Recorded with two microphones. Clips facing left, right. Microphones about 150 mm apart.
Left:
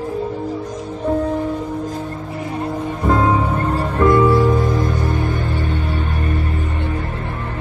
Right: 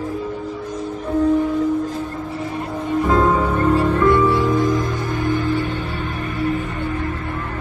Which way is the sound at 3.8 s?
40° left (ahead or behind).